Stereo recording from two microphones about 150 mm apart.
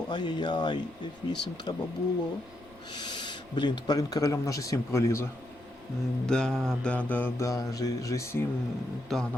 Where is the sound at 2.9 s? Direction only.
30° left (ahead or behind).